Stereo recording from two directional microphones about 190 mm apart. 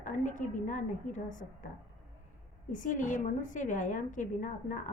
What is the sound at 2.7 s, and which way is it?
A woman's voice, 40° left (ahead or behind).